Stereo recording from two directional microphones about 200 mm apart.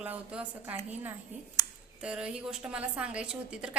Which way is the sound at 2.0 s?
5° right (ahead or behind).